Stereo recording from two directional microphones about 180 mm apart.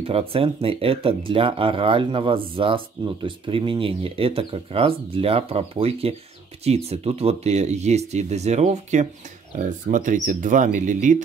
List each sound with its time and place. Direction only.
0.0 s speech: 30° right (ahead or behind)